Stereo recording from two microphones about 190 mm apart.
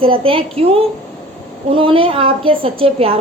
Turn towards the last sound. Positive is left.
turn(degrees=-30)  # may be behind; listen again after turning